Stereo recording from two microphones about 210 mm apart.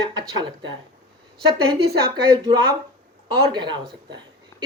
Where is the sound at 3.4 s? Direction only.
20° right (ahead or behind).